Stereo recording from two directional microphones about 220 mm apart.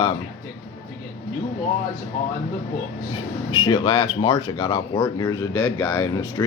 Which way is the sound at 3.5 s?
20° left (ahead or behind).